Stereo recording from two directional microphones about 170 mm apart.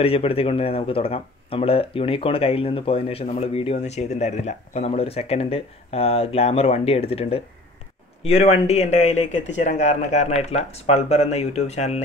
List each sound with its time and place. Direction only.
0.0 s speech: 35° left (ahead or behind)